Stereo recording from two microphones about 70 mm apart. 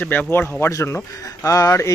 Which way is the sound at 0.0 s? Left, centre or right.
Left.